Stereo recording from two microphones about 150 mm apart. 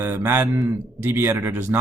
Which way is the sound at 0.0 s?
15° right (ahead or behind).